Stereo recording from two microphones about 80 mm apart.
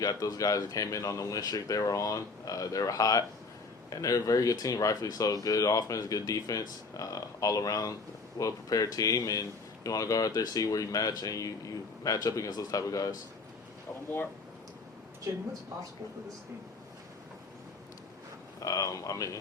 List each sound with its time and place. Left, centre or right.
0.0 s speech: left
18.6 s speech: left